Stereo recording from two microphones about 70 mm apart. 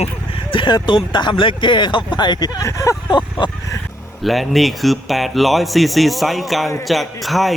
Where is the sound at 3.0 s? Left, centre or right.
Left.